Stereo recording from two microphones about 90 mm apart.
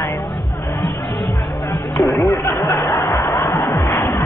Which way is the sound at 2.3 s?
30° left (ahead or behind).